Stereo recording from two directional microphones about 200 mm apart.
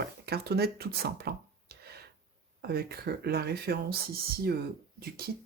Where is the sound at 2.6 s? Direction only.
50° right (ahead or behind).